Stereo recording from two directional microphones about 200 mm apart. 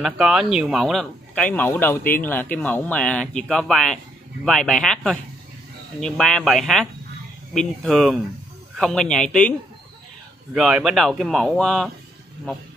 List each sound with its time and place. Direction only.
0.0 s speech: centre (ahead or behind)
10.5 s speech: centre (ahead or behind)